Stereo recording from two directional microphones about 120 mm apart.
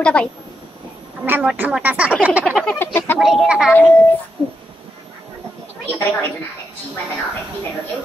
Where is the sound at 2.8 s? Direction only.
15° left (ahead or behind).